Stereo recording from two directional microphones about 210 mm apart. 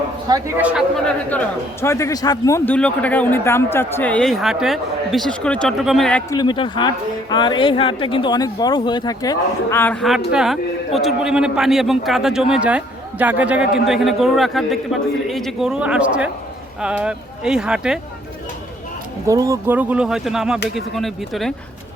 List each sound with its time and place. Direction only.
0.3 s a man's voice: 15° right (ahead or behind)
1.8 s a man's voice: 15° left (ahead or behind)
6.3 s a man's voice: 20° left (ahead or behind); by 18.0 s 5° right (ahead or behind)
19.3 s a man's voice: 15° right (ahead or behind); by 21.5 s centre (ahead or behind)